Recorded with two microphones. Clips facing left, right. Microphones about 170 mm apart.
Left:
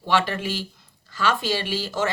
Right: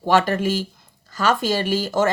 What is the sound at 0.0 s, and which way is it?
A woman's voice, 45° right (ahead or behind).